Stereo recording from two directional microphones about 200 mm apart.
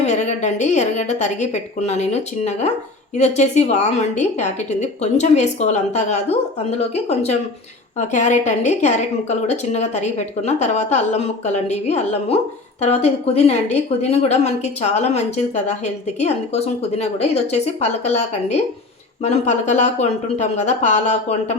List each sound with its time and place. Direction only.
0.0 s a woman's voice: 35° left (ahead or behind)